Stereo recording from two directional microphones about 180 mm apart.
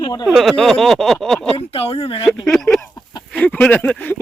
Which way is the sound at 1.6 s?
30° left (ahead or behind).